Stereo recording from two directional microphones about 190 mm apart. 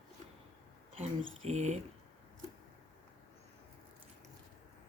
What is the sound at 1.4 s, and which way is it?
Speech, 35° right (ahead or behind).